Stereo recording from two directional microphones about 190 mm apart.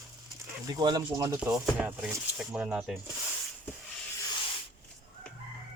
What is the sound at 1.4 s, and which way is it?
Speech, 5° right (ahead or behind).